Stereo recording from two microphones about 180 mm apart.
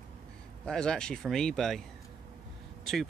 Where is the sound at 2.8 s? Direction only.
Centre (ahead or behind).